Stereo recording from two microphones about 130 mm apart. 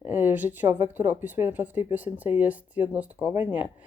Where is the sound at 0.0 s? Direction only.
15° right (ahead or behind).